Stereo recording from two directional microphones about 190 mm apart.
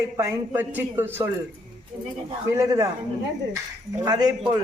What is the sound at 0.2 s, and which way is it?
A man's voice, 10° right (ahead or behind).